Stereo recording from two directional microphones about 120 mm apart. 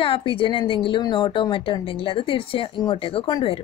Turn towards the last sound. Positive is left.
turn(degrees=50)  # may be behind; listen again after turning